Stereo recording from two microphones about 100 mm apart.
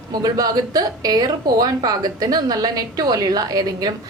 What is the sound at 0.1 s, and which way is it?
A woman's voice, 40° right (ahead or behind).